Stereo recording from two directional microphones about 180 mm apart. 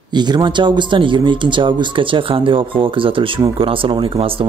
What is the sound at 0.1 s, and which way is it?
Speech, 25° right (ahead or behind).